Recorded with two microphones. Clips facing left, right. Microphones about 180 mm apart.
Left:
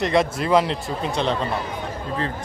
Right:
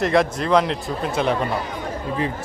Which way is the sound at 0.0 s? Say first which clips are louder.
Right 1 dB; centre (ahead or behind).